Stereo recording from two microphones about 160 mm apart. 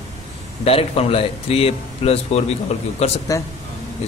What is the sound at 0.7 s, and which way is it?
Speech, 40° left (ahead or behind).